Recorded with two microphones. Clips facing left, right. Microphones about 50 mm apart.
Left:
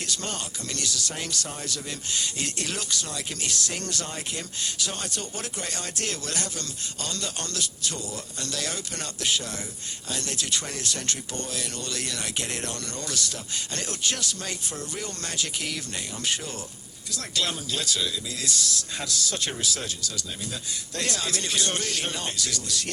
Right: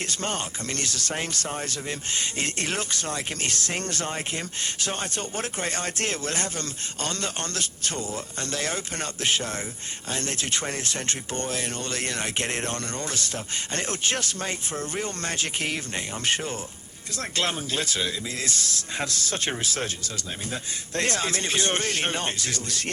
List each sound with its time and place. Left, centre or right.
0.0 s speech: right